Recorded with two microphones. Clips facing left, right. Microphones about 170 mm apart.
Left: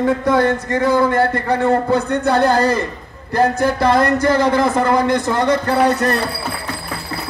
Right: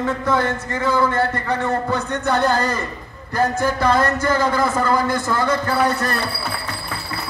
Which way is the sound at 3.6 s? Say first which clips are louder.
Left 3 dB; 15° left (ahead or behind).